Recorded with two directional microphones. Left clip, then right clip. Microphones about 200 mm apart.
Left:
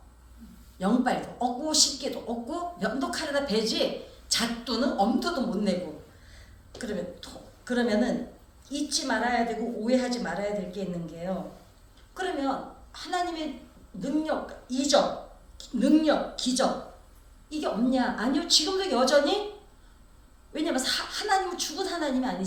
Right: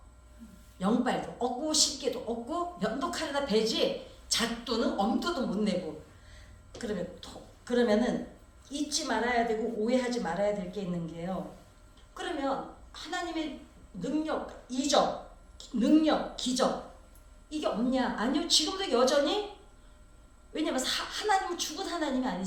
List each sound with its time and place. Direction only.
0.8 s a woman's voice: 15° left (ahead or behind)
6.7 s a woman's voice: 15° left (ahead or behind)
20.5 s a woman's voice: 15° left (ahead or behind)